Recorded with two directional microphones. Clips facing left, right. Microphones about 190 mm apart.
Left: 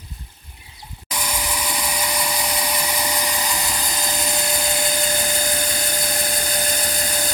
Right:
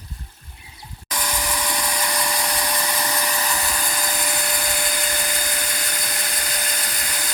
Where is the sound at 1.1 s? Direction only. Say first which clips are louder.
Even; 10° left (ahead or behind).